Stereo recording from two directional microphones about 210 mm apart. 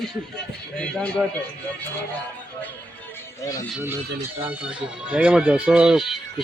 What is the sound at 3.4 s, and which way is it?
Speech, 15° left (ahead or behind).